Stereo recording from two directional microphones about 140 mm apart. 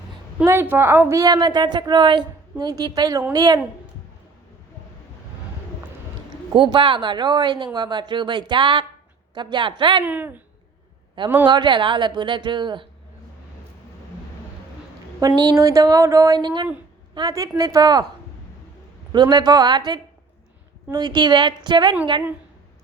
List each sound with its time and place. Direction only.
0.4 s a woman's voice: 15° right (ahead or behind)
6.5 s speech: 40° right (ahead or behind)
10.0 s speech: 15° right (ahead or behind)
11.4 s speech: 35° right (ahead or behind)
15.4 s a woman's voice: 25° right (ahead or behind)
19.1 s speech: 30° right (ahead or behind)